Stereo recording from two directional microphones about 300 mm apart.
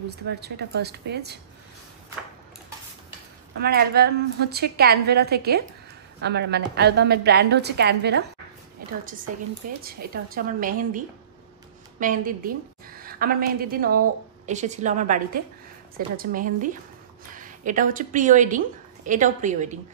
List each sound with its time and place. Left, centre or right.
0.4 s a woman's voice: right
3.5 s a woman's voice: right
9.6 s a woman's voice: right